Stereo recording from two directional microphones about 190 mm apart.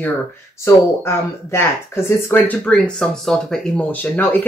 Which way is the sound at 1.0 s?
15° left (ahead or behind).